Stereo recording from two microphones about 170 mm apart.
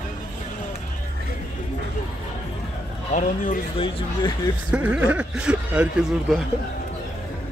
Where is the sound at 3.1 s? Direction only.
50° left (ahead or behind).